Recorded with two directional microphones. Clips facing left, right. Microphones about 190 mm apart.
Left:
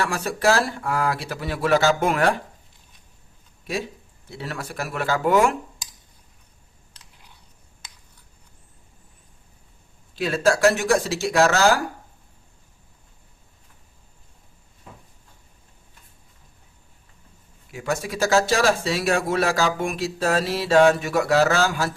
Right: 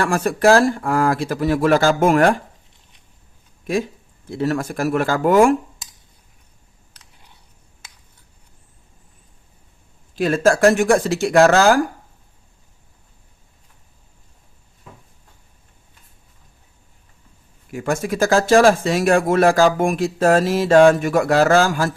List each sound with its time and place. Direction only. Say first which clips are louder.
0.0 s speech: right 6 dB; 50° right (ahead or behind)
4.3 s speech: right 11 dB; 45° right (ahead or behind)
10.2 s speech: right 4 dB; 50° right (ahead or behind)
17.7 s speech: right 5 dB; 50° right (ahead or behind)